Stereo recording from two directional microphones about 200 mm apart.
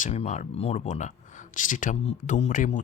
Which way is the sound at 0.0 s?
35° left (ahead or behind).